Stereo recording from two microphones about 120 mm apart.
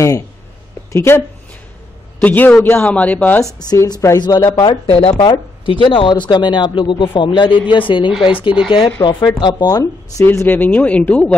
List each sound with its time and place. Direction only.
0.9 s a woman's voice: 20° left (ahead or behind)
3.5 s a woman's voice: 30° left (ahead or behind); by 8.9 s 50° left (ahead or behind)
9.0 s speech: 35° left (ahead or behind)
10.2 s a woman's voice: 20° left (ahead or behind)